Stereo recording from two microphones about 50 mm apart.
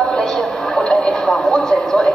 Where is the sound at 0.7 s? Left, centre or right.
Centre.